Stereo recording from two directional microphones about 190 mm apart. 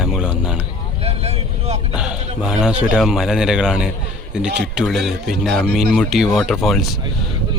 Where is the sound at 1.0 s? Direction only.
35° right (ahead or behind).